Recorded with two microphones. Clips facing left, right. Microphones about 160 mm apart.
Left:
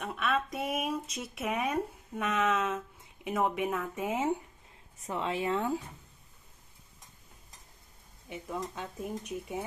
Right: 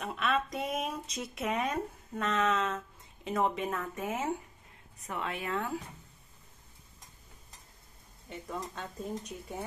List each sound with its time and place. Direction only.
0.0 s speech: centre (ahead or behind)
5.0 s speech: 30° left (ahead or behind)
8.3 s speech: 5° left (ahead or behind)